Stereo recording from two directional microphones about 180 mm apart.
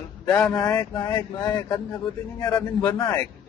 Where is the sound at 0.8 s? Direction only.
20° left (ahead or behind).